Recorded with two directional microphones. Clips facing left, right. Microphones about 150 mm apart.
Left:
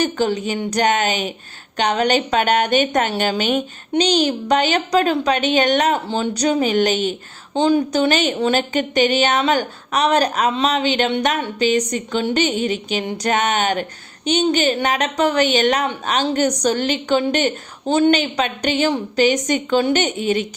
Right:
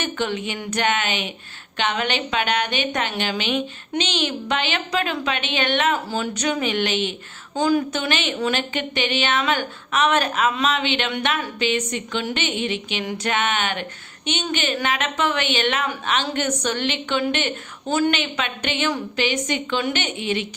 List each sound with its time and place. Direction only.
0.0 s a woman's voice: 35° left (ahead or behind)
6.1 s a woman's voice: 25° left (ahead or behind)
7.5 s speech: 25° left (ahead or behind)
8.1 s a woman's voice: 40° left (ahead or behind)